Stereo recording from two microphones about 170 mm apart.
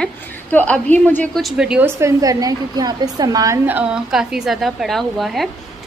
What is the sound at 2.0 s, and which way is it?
A woman's voice, 20° right (ahead or behind).